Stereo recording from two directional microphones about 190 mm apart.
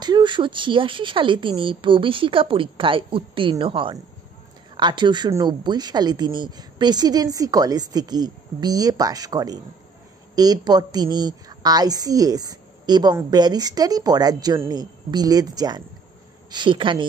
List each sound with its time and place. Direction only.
0.0 s a woman's voice: 25° right (ahead or behind)